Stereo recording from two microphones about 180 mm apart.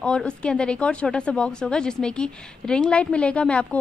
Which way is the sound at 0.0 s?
5° left (ahead or behind).